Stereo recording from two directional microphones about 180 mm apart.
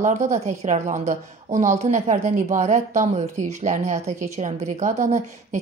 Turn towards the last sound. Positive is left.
turn(degrees=-40)  # may be behind; listen again after turning